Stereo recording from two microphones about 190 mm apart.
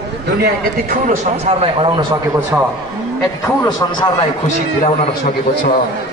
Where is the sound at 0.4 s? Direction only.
45° right (ahead or behind); by 2.4 s 25° right (ahead or behind).